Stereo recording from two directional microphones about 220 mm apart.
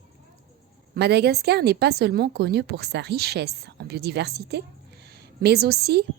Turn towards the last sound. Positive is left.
turn(degrees=-45)  # may be behind; listen again after turning